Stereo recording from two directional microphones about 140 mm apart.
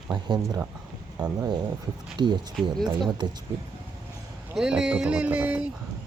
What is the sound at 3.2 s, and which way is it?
Speech, 30° right (ahead or behind).